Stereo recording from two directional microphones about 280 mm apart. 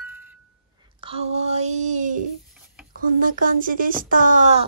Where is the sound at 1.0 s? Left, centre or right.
Right.